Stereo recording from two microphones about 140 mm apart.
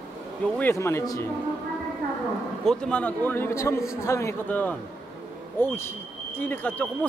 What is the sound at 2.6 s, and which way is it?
Speech, 5° left (ahead or behind).